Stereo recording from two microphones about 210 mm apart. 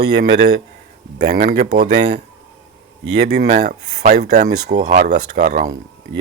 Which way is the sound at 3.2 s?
50° right (ahead or behind).